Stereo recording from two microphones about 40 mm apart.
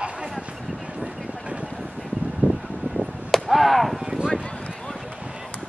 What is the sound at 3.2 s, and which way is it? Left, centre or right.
Arrow, centre.